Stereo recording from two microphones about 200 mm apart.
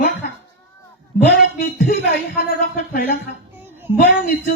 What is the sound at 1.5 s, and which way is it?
Speech, 45° left (ahead or behind).